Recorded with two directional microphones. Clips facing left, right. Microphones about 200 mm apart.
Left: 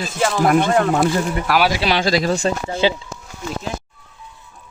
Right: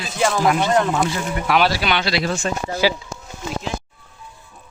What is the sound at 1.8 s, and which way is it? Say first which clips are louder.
Speech: left 3 dB; 30° left (ahead or behind).